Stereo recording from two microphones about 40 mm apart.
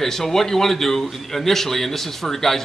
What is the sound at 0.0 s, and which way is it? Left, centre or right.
A man's voice, centre.